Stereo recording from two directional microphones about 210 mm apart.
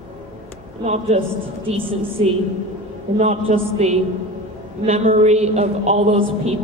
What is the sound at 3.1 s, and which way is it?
A woman's voice, 30° right (ahead or behind).